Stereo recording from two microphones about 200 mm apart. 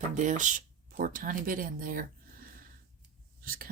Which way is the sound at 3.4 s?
45° right (ahead or behind).